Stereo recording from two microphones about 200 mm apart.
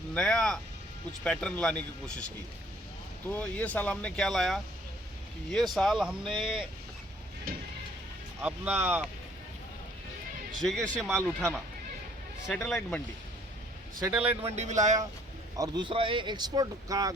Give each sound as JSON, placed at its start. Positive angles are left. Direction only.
{"t": 0.1, "sound": "speech", "side_deg": 5}
{"t": 3.2, "sound": "speech", "side_deg": 5}
{"t": 7.5, "sound": "a sound", "side_deg": -45}
{"t": 8.4, "sound": "speech", "side_deg": -10}
{"t": 10.6, "sound": "speech", "side_deg": 0}
{"t": 12.5, "sound": "speech", "side_deg": 10}
{"t": 14.2, "sound": "speech", "side_deg": -30}
{"t": 15.5, "sound": "speech", "side_deg": -20}